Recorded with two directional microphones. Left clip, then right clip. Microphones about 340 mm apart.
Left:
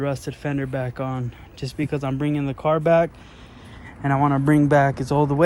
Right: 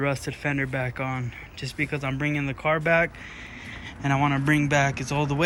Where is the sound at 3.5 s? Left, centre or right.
Left.